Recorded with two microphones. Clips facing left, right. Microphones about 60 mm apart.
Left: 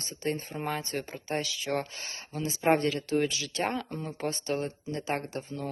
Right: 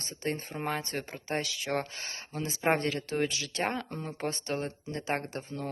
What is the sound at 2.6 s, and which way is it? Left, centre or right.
Speech, right.